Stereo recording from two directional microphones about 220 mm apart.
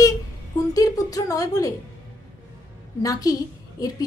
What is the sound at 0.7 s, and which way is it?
A woman's voice, 15° left (ahead or behind).